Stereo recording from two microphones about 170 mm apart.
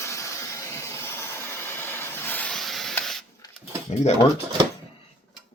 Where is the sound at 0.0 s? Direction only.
20° left (ahead or behind); by 2.9 s centre (ahead or behind).